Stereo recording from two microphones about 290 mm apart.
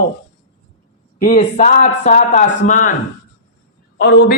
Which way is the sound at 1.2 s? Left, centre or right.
Left.